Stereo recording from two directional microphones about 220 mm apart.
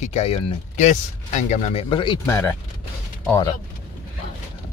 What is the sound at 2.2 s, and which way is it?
Speech, 10° left (ahead or behind).